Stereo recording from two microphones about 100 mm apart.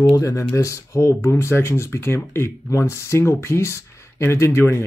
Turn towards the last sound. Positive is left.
turn(degrees=25)  # may be behind; listen again after turning